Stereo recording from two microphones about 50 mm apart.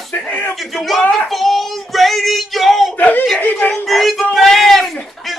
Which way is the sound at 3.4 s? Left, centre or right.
Left.